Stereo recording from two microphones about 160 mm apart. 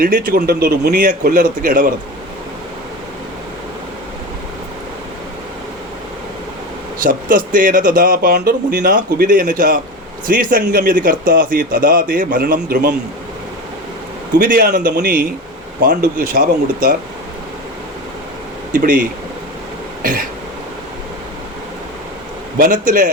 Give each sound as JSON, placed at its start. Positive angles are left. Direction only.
{"t": 0.0, "sound": "speech", "side_deg": -60}
{"t": 7.0, "sound": "speech", "side_deg": -60}
{"t": 14.3, "sound": "speech", "side_deg": -60}
{"t": 18.7, "sound": "speech", "side_deg": -60}
{"t": 20.0, "sound": "throat clearing", "side_deg": -65}
{"t": 22.5, "sound": "speech", "side_deg": -60}